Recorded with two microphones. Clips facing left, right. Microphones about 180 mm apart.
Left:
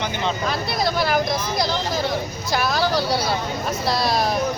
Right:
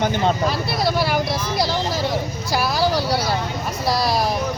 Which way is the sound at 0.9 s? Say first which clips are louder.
Even; 5° right (ahead or behind).